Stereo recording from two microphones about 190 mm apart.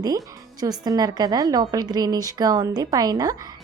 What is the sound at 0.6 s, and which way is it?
A woman's voice, 20° right (ahead or behind).